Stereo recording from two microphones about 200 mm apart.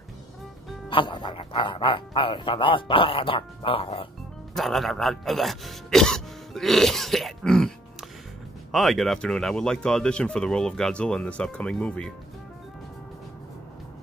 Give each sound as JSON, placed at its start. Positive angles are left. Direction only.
{"t": 0.8, "sound": "speech", "side_deg": 25}
{"t": 4.6, "sound": "speech", "side_deg": 0}
{"t": 8.7, "sound": "speech", "side_deg": 0}